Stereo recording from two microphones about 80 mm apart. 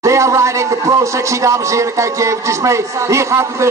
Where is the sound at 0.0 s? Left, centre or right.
Right.